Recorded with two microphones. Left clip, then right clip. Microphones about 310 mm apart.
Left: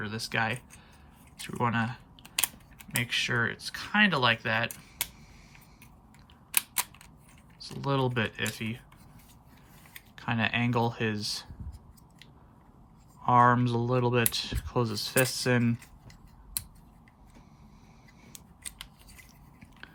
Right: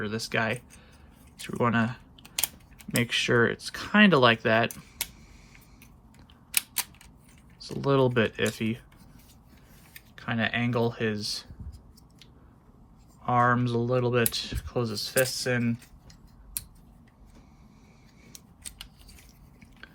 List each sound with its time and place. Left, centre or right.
0.0 s speech: centre
7.6 s speech: centre
9.9 s speech: centre
13.2 s speech: centre